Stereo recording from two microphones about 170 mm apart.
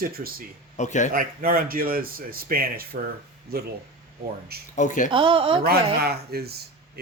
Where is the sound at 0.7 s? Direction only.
45° left (ahead or behind).